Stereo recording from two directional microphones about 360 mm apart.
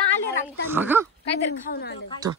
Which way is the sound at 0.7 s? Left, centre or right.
Centre.